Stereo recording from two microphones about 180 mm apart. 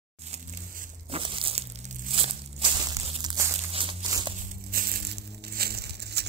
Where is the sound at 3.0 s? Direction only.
25° right (ahead or behind).